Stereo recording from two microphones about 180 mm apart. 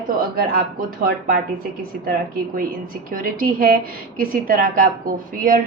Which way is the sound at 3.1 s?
50° right (ahead or behind).